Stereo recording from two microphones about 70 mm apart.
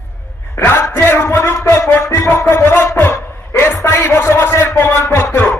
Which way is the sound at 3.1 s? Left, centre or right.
Left.